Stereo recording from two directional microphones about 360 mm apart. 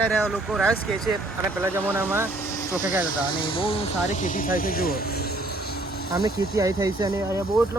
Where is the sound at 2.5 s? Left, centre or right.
Centre.